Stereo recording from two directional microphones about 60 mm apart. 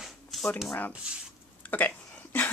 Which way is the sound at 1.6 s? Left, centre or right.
Left.